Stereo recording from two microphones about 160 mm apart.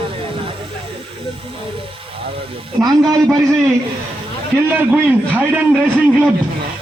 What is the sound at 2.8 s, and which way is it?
Speech, 25° right (ahead or behind).